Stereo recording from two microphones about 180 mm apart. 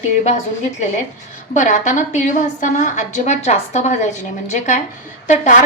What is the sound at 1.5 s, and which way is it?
A woman's voice, 45° left (ahead or behind).